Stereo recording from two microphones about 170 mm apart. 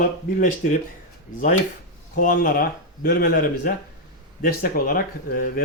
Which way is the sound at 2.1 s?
55° left (ahead or behind).